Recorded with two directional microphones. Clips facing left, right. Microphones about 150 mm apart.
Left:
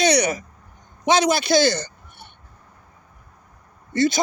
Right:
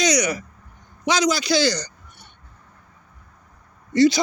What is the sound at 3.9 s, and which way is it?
Speech, 50° left (ahead or behind).